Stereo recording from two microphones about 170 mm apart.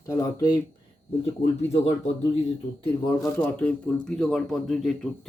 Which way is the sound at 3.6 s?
5° left (ahead or behind).